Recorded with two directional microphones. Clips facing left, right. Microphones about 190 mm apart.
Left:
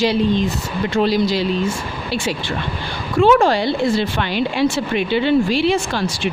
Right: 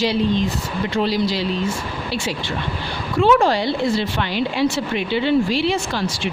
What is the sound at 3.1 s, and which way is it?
A woman's voice, 50° left (ahead or behind).